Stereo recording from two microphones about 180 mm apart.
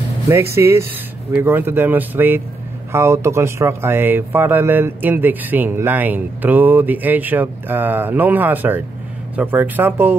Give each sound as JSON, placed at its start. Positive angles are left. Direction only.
{"t": 0.6, "sound": "speech", "side_deg": -15}